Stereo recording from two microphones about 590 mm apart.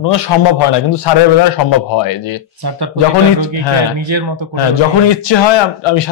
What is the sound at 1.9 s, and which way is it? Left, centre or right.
Speech, left.